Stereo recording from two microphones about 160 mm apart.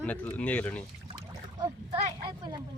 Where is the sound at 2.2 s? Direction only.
25° right (ahead or behind).